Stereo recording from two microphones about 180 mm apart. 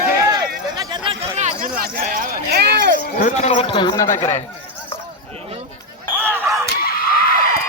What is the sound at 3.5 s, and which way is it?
Speech, 30° left (ahead or behind).